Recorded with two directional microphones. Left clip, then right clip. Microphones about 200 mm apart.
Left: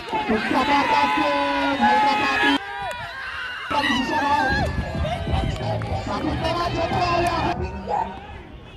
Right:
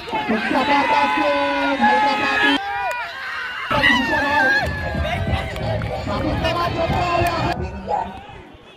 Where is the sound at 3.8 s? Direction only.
5° right (ahead or behind).